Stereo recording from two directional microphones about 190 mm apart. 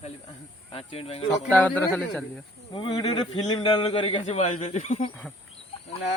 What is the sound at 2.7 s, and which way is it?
Speech, 25° left (ahead or behind).